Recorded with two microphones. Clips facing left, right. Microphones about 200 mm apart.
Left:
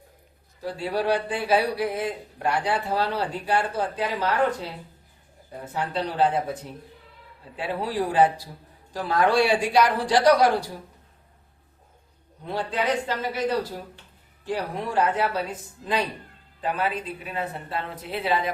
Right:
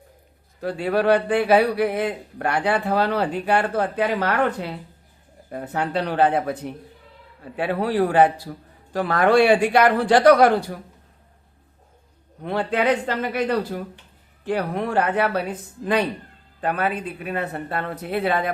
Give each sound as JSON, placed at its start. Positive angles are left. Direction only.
{"t": 0.6, "sound": "speech", "side_deg": -60}
{"t": 12.4, "sound": "speech", "side_deg": -65}